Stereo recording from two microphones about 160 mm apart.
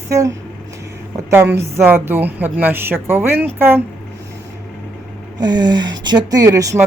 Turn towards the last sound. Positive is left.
turn(degrees=-20)  # may be behind; listen again after turning